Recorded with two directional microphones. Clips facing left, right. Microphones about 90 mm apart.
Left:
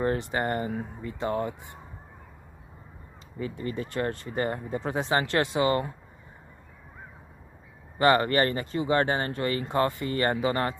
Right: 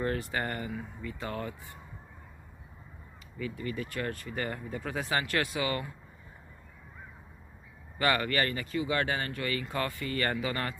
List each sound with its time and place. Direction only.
0.0 s speech: 25° left (ahead or behind)
0.7 s speech: 40° left (ahead or behind)
1.2 s speech: 25° left (ahead or behind)
3.3 s speech: 35° left (ahead or behind)
8.0 s speech: 30° left (ahead or behind)